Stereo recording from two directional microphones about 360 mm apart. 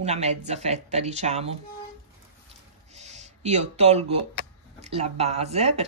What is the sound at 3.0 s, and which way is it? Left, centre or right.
Speech, centre.